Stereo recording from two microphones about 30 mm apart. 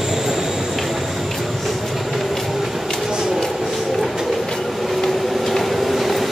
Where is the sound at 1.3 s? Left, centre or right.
Centre.